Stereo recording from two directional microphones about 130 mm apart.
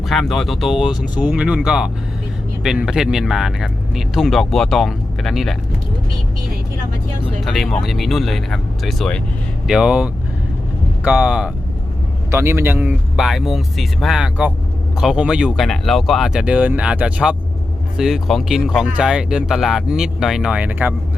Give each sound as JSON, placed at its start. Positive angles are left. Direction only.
{"t": 0.1, "sound": "speech", "side_deg": 0}
{"t": 7.4, "sound": "speech", "side_deg": 0}
{"t": 12.3, "sound": "a man's voice", "side_deg": -20}
{"t": 13.1, "sound": "speech", "side_deg": 0}